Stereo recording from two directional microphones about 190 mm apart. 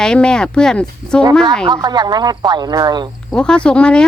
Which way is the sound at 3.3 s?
5° left (ahead or behind).